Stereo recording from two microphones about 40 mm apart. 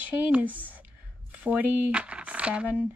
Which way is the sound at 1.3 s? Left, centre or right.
Right.